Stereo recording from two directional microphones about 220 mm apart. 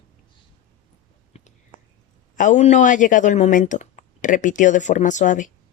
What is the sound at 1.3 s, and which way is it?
Whispering, 30° left (ahead or behind).